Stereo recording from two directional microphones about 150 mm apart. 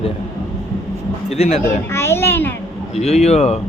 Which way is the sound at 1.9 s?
15° left (ahead or behind).